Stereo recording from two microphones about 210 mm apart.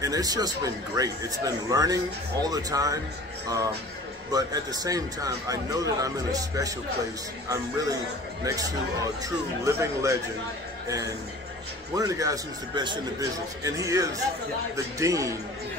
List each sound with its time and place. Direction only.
0.0 s speech: 15° right (ahead or behind)
4.3 s speech: 15° right (ahead or behind)
11.9 s speech: 15° right (ahead or behind)